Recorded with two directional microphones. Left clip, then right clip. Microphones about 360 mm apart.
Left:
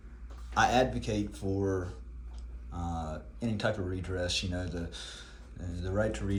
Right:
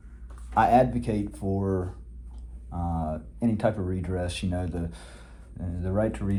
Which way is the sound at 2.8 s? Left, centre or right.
Centre.